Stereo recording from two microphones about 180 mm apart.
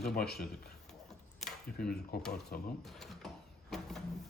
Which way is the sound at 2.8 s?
Centre (ahead or behind).